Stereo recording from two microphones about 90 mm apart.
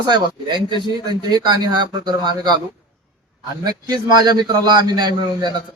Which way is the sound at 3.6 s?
50° right (ahead or behind).